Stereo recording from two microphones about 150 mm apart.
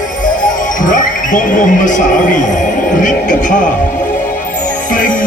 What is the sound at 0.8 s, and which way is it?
Speech, 60° left (ahead or behind).